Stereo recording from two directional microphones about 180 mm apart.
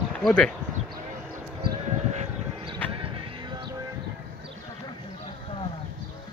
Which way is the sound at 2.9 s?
30° right (ahead or behind).